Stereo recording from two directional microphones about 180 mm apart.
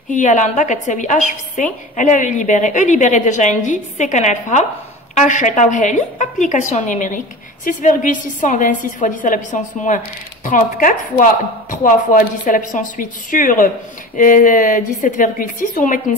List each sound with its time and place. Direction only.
0.1 s a woman's voice: 45° left (ahead or behind)